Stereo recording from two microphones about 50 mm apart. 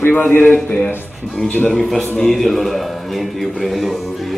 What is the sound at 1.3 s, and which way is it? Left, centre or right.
Speech, left.